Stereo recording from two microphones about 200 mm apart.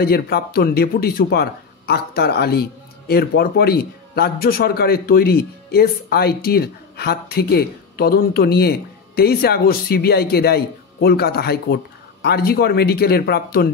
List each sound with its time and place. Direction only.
0.0 s speech: 50° left (ahead or behind)